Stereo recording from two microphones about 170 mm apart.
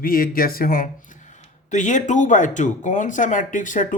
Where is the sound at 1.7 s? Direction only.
45° left (ahead or behind).